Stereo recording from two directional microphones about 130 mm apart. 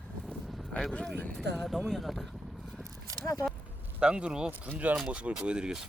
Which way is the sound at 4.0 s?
5° right (ahead or behind).